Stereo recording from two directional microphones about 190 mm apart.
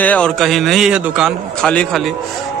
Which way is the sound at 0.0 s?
5° left (ahead or behind).